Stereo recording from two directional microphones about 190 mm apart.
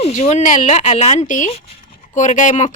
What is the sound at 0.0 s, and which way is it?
Speech, 35° left (ahead or behind).